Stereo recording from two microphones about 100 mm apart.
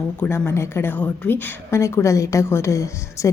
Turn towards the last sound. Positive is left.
turn(degrees=30)  # may be behind; listen again after turning